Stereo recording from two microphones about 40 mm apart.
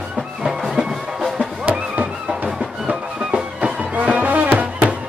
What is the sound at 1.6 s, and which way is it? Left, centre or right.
Music, right.